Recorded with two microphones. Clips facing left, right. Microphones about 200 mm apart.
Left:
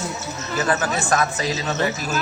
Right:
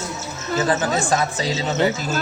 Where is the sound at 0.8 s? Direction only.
20° right (ahead or behind).